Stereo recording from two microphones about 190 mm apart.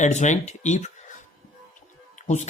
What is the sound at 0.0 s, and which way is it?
Speech, 40° left (ahead or behind).